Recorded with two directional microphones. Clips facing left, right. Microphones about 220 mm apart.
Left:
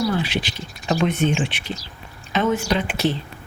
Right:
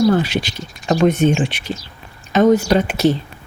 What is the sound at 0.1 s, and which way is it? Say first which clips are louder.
Speech: right 6 dB; 45° right (ahead or behind).